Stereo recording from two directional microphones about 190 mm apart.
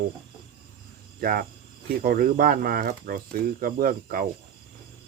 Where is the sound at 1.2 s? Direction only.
50° right (ahead or behind).